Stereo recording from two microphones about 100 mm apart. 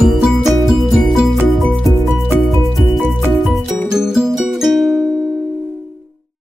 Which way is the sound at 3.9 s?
5° right (ahead or behind).